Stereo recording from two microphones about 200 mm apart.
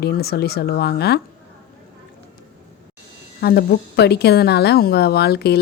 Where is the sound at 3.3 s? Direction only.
50° left (ahead or behind).